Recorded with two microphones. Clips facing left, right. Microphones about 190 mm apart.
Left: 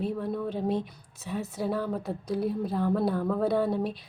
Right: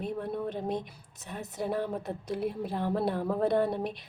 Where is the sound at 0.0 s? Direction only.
15° right (ahead or behind).